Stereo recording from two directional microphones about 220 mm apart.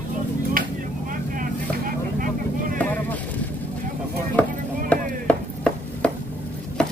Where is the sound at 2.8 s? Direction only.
5° left (ahead or behind).